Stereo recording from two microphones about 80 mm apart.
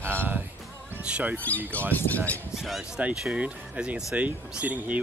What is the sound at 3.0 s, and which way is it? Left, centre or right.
Speech, centre.